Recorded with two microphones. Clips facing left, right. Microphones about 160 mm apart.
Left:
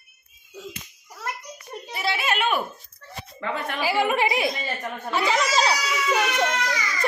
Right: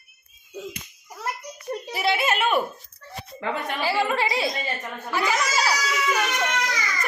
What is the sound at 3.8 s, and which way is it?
A woman's voice, 15° left (ahead or behind).